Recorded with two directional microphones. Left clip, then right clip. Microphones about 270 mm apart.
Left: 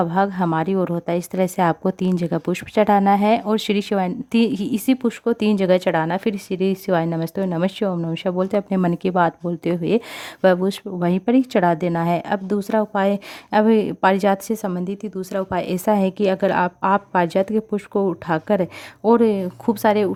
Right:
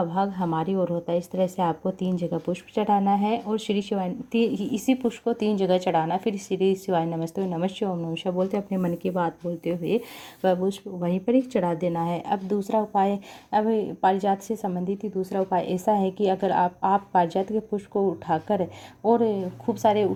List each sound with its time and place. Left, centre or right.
0.0 s a woman's voice: left